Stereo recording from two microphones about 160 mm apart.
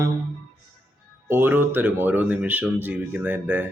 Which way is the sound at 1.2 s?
15° right (ahead or behind).